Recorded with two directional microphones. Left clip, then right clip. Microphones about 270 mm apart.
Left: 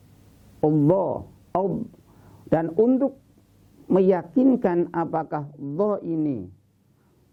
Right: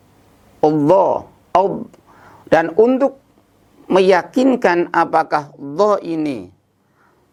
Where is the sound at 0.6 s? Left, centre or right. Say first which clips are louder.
Right 8 dB; centre.